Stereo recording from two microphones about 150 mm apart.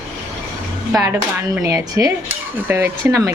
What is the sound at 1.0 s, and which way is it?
Speech, 20° right (ahead or behind).